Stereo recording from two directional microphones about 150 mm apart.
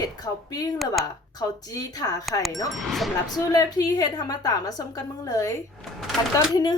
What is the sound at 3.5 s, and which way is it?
A woman's voice, 25° left (ahead or behind).